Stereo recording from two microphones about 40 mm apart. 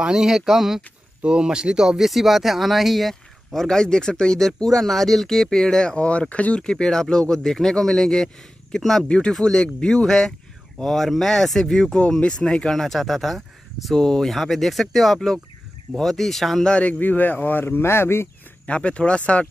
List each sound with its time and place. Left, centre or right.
0.0 s speech: centre
1.2 s speech: right
2.0 s speech: centre
3.6 s speech: centre; by 6.6 s left
6.6 s speech: centre
13.9 s speech: centre
14.3 s speech: centre
16.6 s speech: left
17.0 s speech: left
18.7 s speech: left